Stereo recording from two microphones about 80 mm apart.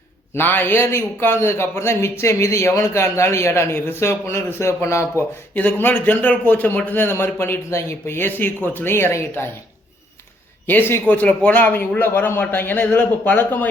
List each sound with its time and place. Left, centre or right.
0.3 s a man's voice: left
5.5 s a man's voice: left
10.7 s a man's voice: left